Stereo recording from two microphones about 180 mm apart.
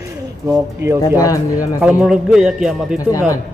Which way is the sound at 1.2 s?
20° left (ahead or behind).